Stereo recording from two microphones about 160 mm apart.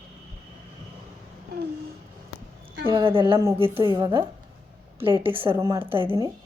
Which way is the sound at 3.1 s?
35° right (ahead or behind).